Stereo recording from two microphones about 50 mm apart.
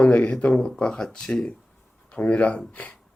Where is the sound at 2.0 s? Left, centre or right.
Left.